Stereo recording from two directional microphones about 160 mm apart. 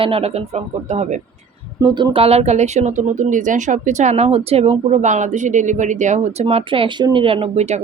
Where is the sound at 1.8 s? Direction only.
30° right (ahead or behind).